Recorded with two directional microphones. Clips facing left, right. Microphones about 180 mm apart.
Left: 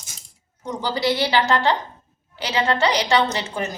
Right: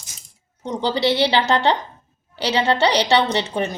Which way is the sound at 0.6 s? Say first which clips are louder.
Right 3 dB; 25° right (ahead or behind).